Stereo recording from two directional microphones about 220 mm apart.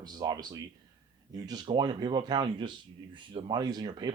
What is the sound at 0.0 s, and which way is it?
Speech, 20° right (ahead or behind).